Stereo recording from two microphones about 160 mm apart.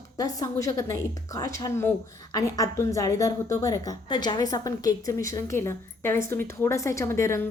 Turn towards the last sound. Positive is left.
turn(degrees=15)  # may be behind; listen again after turning